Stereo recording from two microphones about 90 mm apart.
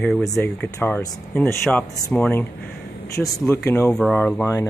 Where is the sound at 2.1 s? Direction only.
20° left (ahead or behind).